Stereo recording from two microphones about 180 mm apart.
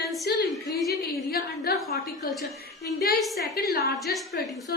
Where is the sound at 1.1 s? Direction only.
55° left (ahead or behind).